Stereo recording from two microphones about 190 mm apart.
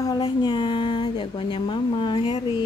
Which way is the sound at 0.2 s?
25° left (ahead or behind).